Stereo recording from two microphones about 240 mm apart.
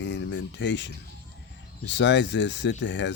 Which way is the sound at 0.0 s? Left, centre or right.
Left.